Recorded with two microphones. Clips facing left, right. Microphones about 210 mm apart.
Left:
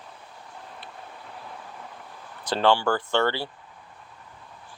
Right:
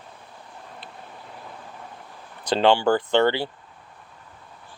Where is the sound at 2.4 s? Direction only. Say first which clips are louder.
Right 3 dB; 20° right (ahead or behind).